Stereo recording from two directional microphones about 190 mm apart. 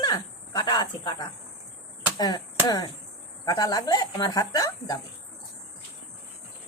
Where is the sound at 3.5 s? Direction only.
20° left (ahead or behind).